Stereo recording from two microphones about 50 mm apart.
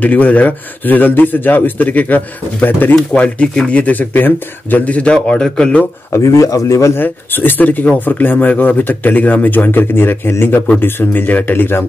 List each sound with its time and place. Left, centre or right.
0.0 s speech: left
3.1 s speech: left
6.1 s speech: left
7.0 s speech: left